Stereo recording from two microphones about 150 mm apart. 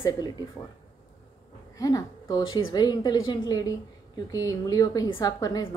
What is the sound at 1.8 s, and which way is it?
Speech, 20° left (ahead or behind).